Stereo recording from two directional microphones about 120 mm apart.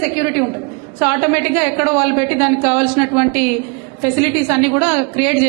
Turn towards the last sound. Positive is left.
turn(degrees=-20)  # may be behind; listen again after turning